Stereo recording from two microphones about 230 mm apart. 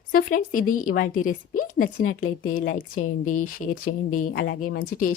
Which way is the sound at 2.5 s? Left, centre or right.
Left.